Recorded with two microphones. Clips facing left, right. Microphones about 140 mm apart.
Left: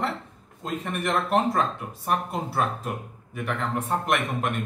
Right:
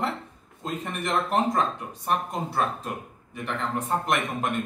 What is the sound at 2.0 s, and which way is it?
Speech, 5° left (ahead or behind).